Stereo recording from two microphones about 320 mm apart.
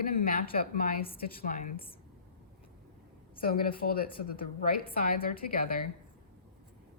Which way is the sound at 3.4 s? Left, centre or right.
Left.